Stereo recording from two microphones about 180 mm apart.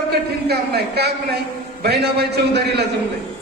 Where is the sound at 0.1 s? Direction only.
65° right (ahead or behind).